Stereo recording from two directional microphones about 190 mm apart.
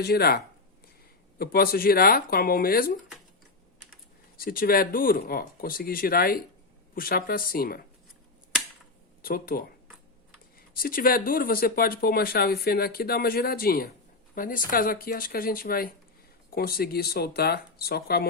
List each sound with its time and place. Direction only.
0.0 s speech: 55° left (ahead or behind)
4.4 s speech: 50° left (ahead or behind)
9.2 s speech: 50° left (ahead or behind)
10.8 s speech: 50° left (ahead or behind)